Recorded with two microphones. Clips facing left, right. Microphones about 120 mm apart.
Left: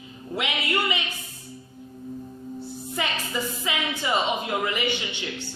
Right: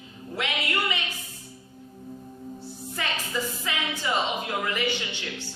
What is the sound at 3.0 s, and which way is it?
Speech, 15° left (ahead or behind).